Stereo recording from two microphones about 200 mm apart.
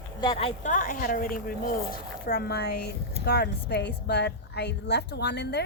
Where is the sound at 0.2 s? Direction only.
25° left (ahead or behind).